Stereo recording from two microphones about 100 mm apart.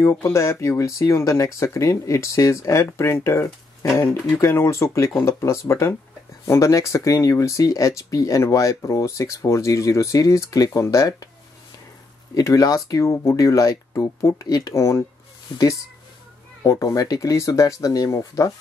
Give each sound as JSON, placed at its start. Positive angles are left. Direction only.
{"t": 0.0, "sound": "speech", "side_deg": 30}
{"t": 12.4, "sound": "speech", "side_deg": 40}
{"t": 16.6, "sound": "speech", "side_deg": 35}